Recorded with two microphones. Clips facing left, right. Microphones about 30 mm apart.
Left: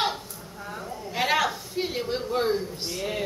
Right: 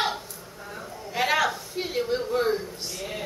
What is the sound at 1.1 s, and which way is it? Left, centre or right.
A man's voice, centre.